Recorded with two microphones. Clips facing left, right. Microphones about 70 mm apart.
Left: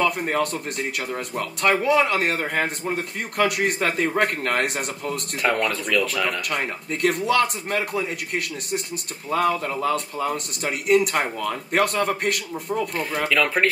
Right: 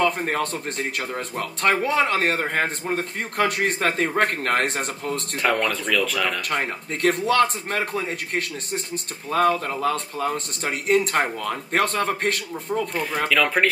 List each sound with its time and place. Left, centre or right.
0.3 s a man's voice: right
5.4 s speech: centre
6.5 s a man's voice: right
13.3 s speech: centre